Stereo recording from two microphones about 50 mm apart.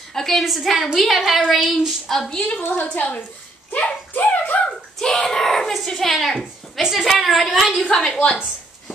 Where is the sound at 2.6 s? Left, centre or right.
Left.